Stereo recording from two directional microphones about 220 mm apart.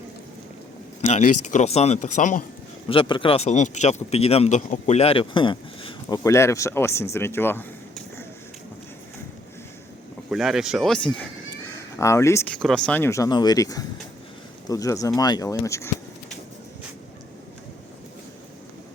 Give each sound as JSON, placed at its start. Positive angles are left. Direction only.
{"t": 1.0, "sound": "speech", "side_deg": 35}
{"t": 2.9, "sound": "speech", "side_deg": 25}
{"t": 10.2, "sound": "speech", "side_deg": 0}